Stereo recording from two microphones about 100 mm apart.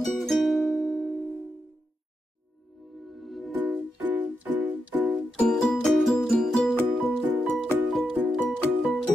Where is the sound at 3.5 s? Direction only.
20° right (ahead or behind).